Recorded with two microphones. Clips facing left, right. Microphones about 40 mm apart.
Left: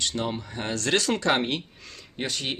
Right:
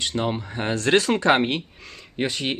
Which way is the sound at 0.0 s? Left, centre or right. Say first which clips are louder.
Right 4 dB; centre.